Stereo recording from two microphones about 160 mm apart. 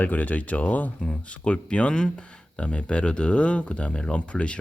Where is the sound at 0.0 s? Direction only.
10° left (ahead or behind).